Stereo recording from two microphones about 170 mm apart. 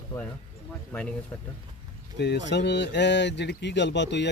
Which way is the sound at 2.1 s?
80° left.